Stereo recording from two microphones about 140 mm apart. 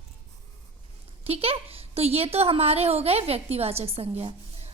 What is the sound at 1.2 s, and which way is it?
A woman's voice, 45° right (ahead or behind).